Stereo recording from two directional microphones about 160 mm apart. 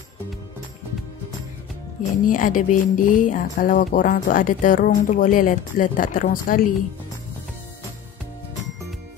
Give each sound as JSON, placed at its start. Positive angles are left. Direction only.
{"t": 2.2, "sound": "speech", "side_deg": 55}